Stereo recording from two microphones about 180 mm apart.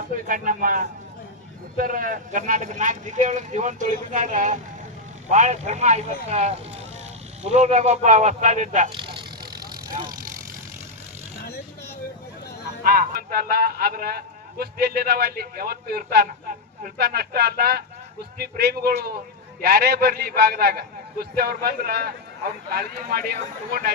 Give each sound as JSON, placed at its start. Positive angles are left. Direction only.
{"t": 0.3, "sound": "speech", "side_deg": -50}
{"t": 9.0, "sound": "vehicle", "side_deg": -25}
{"t": 12.8, "sound": "a man's voice", "side_deg": -55}